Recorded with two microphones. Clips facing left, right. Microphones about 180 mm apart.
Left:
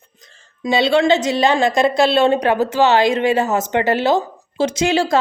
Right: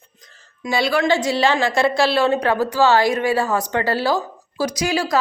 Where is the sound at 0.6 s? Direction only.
25° left (ahead or behind).